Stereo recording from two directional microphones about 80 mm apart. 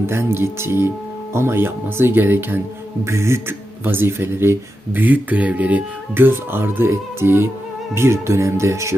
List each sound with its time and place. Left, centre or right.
0.1 s speech: right